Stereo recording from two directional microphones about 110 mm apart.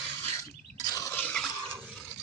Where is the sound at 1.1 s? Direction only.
15° left (ahead or behind).